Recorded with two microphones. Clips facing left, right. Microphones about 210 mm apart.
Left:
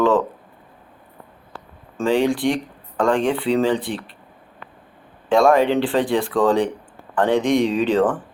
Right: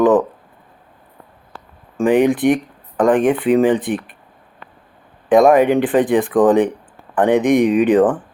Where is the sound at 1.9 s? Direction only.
20° right (ahead or behind).